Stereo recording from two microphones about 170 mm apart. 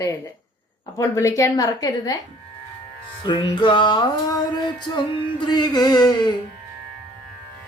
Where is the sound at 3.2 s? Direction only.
25° left (ahead or behind).